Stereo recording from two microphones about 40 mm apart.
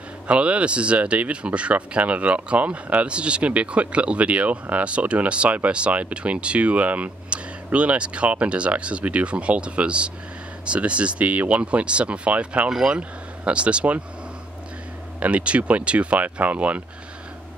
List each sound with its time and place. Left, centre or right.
0.3 s speech: right
15.1 s speech: right